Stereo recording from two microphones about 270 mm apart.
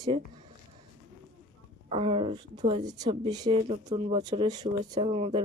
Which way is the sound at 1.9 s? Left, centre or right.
Right.